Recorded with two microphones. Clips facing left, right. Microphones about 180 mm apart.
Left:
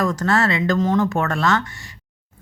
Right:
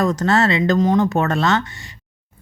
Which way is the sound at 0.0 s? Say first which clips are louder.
Right 2 dB; 20° right (ahead or behind).